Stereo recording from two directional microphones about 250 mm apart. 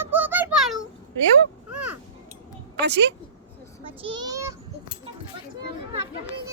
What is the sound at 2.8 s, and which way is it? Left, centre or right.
Speech, right.